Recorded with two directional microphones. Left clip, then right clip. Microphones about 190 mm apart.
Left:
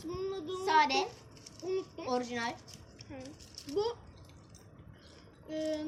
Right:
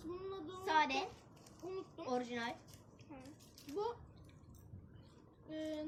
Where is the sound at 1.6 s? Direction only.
15° left (ahead or behind).